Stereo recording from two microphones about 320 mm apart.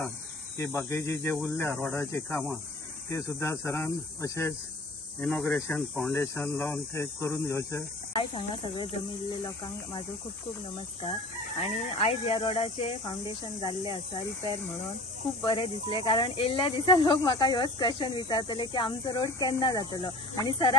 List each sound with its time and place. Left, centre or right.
0.6 s speech: centre
11.6 s speech: centre
15.4 s speech: centre